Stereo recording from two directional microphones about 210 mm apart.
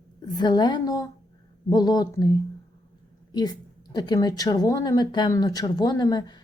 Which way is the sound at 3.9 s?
20° left (ahead or behind).